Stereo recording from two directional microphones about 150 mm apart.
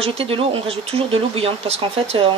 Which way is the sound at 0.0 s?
40° right (ahead or behind).